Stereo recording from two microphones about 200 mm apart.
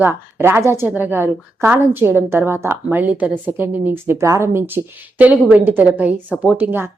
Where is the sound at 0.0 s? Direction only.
10° right (ahead or behind).